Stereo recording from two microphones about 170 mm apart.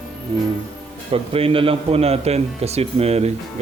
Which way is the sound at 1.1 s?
35° right (ahead or behind).